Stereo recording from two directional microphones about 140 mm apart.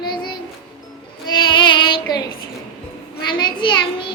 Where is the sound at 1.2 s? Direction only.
30° left (ahead or behind).